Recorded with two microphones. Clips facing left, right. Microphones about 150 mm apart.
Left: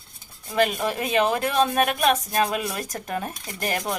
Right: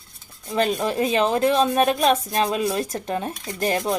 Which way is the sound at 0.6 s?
30° right (ahead or behind).